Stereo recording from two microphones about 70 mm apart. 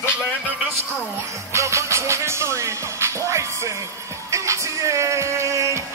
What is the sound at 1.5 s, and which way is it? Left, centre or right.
Music, right.